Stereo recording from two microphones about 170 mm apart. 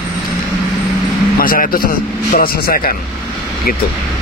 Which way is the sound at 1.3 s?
55° left (ahead or behind).